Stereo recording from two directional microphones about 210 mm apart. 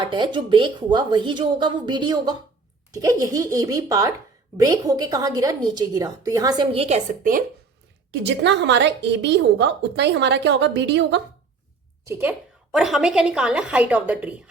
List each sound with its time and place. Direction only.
0.0 s a woman's voice: 20° right (ahead or behind)
8.1 s a woman's voice: 55° right (ahead or behind)
12.0 s a woman's voice: 10° right (ahead or behind)